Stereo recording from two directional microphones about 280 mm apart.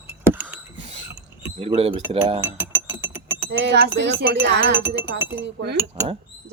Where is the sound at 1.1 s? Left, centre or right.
Centre.